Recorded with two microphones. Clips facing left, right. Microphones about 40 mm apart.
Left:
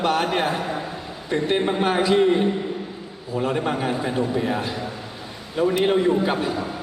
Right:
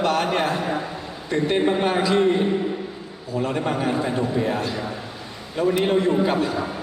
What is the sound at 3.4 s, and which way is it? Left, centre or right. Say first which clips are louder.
A man's voice: even; centre.